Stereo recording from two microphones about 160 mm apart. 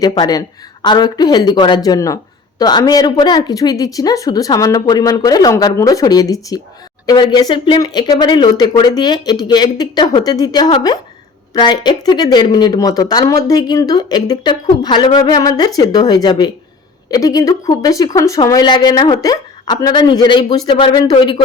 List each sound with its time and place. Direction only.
0.0 s a woman's voice: 25° left (ahead or behind)